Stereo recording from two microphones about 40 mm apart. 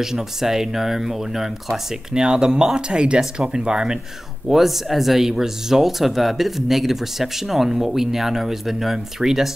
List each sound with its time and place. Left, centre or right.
0.0 s speech: centre
4.5 s speech: centre